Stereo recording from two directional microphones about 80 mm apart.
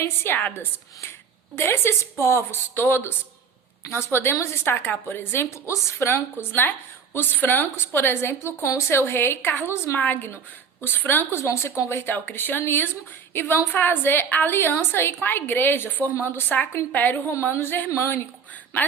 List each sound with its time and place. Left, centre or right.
0.0 s a woman's voice: left
1.5 s a woman's voice: left